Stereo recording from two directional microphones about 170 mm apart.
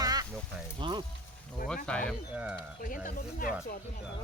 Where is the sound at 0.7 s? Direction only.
25° right (ahead or behind).